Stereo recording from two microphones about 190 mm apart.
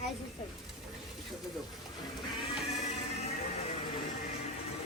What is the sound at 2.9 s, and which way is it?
Music, 35° left (ahead or behind).